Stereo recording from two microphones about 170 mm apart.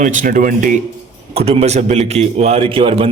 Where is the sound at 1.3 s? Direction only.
35° right (ahead or behind).